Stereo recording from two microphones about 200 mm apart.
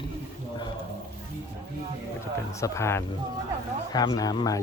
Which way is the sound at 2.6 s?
15° left (ahead or behind).